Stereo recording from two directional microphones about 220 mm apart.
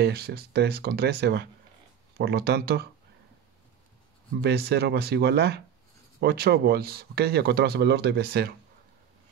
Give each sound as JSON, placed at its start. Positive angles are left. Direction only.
{"t": 0.0, "sound": "speech", "side_deg": -45}
{"t": 4.4, "sound": "speech", "side_deg": -45}